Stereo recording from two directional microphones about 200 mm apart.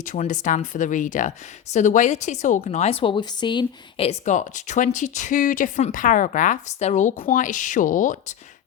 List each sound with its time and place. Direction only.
0.0 s a woman's voice: 40° left (ahead or behind)